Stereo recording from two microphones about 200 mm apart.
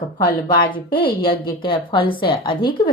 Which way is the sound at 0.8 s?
50° left (ahead or behind).